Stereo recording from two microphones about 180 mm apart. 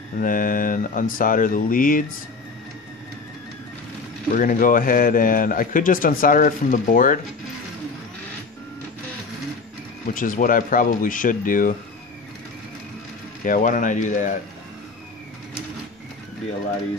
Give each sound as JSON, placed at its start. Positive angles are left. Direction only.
{"t": 0.2, "sound": "a man's voice", "side_deg": 50}
{"t": 4.3, "sound": "a man's voice", "side_deg": 50}
{"t": 10.0, "sound": "a man's voice", "side_deg": 45}
{"t": 13.4, "sound": "a man's voice", "side_deg": 45}